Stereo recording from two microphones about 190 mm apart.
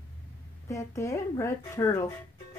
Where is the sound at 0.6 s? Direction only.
15° left (ahead or behind).